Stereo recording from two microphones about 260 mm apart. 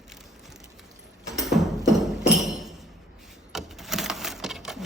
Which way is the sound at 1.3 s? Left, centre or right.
Centre.